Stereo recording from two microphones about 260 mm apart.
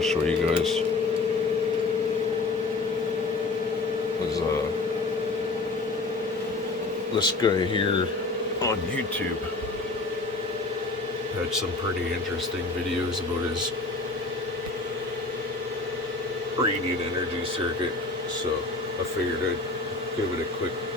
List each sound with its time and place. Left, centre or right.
0.0 s speech: centre
7.4 s speech: centre